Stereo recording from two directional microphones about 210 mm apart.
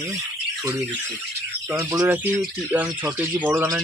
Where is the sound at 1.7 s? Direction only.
15° right (ahead or behind).